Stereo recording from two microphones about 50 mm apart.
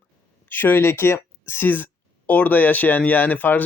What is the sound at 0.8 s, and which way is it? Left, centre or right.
Speech, left.